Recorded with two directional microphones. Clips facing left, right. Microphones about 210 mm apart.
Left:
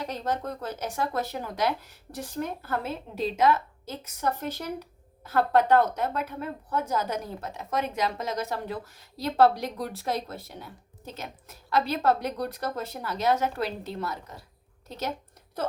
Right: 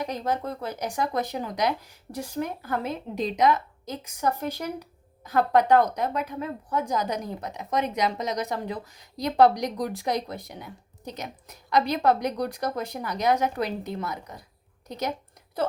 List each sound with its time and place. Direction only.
0.0 s a woman's voice: 10° right (ahead or behind)